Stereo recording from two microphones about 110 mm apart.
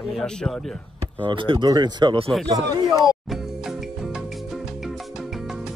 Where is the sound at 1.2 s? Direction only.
50° right (ahead or behind).